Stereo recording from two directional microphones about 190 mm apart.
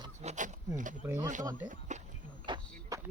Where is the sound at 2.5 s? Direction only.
25° right (ahead or behind).